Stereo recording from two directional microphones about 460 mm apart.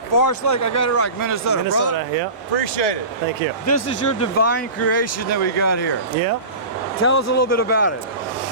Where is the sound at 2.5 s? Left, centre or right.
Left.